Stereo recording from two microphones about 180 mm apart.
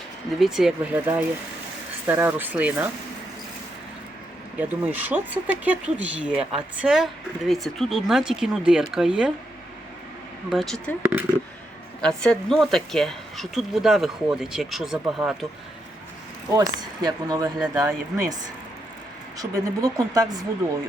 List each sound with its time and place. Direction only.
0.3 s speech: centre (ahead or behind)
4.5 s speech: 10° right (ahead or behind)
10.5 s speech: centre (ahead or behind)
12.0 s speech: centre (ahead or behind)
16.5 s speech: 20° right (ahead or behind)
19.4 s speech: 20° right (ahead or behind)